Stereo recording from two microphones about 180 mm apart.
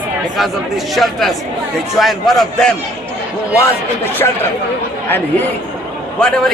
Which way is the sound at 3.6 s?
10° left (ahead or behind).